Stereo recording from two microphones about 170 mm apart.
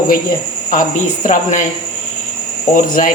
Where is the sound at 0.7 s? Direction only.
50° left (ahead or behind).